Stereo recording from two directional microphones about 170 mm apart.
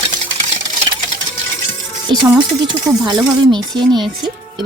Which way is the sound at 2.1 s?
25° right (ahead or behind).